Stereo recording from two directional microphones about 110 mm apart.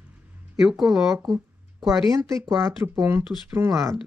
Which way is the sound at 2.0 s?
30° right (ahead or behind).